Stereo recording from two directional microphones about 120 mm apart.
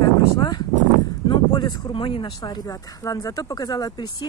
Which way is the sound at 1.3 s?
40° left (ahead or behind).